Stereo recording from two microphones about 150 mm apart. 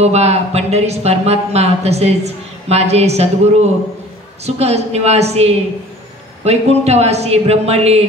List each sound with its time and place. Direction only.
0.0 s speech: 45° right (ahead or behind)